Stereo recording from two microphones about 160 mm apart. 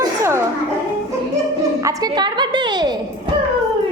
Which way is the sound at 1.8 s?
20° right (ahead or behind).